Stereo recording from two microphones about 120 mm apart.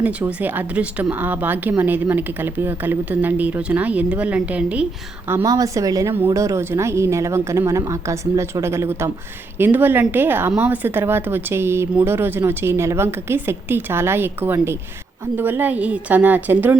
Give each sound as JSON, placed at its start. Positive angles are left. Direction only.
{"t": 0.0, "sound": "a woman's voice", "side_deg": -10}
{"t": 5.3, "sound": "a woman's voice", "side_deg": -30}